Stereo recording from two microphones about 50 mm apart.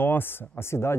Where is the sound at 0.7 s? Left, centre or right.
Left.